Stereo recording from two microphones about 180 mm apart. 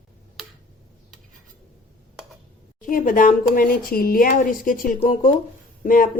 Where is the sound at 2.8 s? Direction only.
50° left (ahead or behind).